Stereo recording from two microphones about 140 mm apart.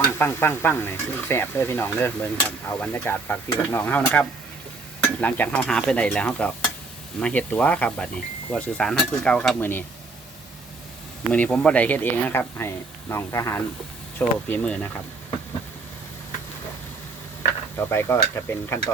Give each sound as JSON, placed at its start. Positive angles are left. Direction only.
{"t": 0.2, "sound": "speech", "side_deg": 15}
{"t": 11.3, "sound": "speech", "side_deg": 10}
{"t": 17.7, "sound": "speech", "side_deg": 20}